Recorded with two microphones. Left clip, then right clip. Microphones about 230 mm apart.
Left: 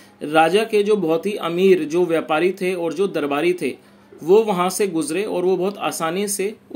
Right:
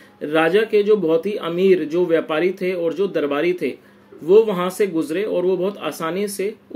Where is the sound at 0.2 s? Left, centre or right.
Centre.